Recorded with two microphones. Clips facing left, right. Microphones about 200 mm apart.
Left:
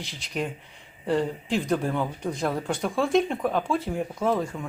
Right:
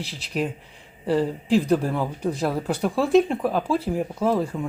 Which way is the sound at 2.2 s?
35° right (ahead or behind).